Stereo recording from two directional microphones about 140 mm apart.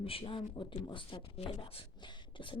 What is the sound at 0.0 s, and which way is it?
Speech, 40° left (ahead or behind).